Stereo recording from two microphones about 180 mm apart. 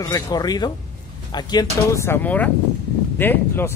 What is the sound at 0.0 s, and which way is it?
Speech, 20° left (ahead or behind).